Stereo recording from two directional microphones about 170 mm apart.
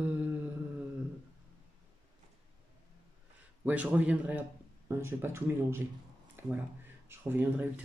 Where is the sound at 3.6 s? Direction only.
10° right (ahead or behind).